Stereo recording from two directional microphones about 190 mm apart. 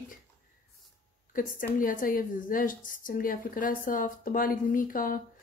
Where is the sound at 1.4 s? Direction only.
45° left (ahead or behind).